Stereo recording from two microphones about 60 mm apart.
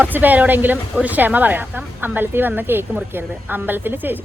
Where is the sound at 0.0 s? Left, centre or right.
Right.